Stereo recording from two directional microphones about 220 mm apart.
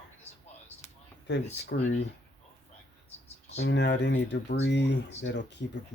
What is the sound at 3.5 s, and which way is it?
Speech, 50° left (ahead or behind).